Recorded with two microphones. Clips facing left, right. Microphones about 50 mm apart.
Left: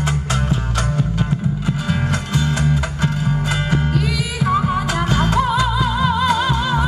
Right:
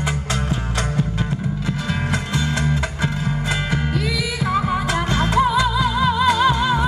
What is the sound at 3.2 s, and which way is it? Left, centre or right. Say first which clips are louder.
Music: left 2 dB; centre.